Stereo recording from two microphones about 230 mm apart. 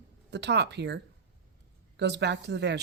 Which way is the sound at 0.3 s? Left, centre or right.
Right.